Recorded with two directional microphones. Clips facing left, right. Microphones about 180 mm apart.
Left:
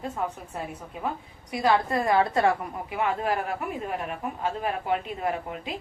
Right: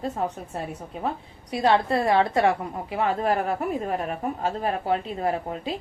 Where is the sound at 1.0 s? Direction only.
30° right (ahead or behind).